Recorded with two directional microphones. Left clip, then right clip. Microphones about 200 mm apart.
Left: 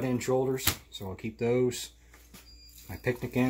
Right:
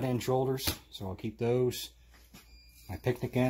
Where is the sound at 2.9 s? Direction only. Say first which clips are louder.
Left 1 dB; 35° right (ahead or behind).